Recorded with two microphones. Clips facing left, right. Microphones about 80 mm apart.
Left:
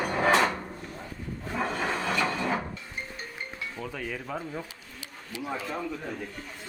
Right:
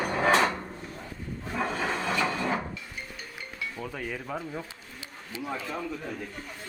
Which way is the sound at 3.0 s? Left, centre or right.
Left.